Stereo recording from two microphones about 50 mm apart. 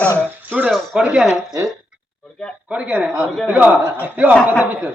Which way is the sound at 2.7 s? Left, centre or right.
Centre.